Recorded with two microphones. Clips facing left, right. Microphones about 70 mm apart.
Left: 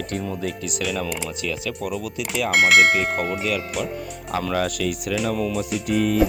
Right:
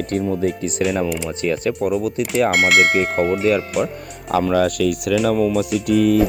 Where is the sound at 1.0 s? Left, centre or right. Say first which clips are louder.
Right 5 dB; centre.